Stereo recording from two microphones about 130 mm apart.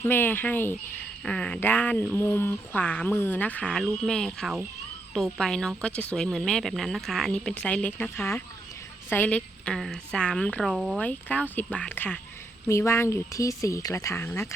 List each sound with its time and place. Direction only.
0.0 s speech: 15° left (ahead or behind)